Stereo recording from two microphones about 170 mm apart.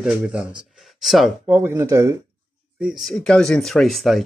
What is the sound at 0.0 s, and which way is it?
Speech, 5° right (ahead or behind).